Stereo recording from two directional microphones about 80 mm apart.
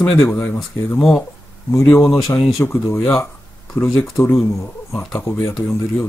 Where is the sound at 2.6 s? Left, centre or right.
Left.